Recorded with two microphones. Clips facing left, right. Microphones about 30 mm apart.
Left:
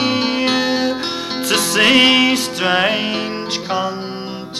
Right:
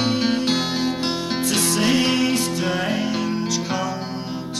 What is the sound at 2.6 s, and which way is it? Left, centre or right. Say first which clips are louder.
Music: left 6 dB; left.